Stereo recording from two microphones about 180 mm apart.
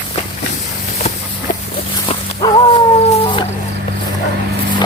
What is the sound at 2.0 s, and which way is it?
Dog, 25° left (ahead or behind).